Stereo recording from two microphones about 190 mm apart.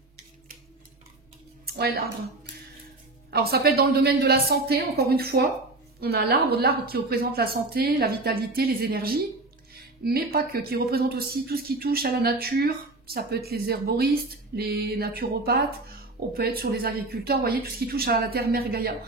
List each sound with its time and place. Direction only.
1.7 s speech: 55° right (ahead or behind)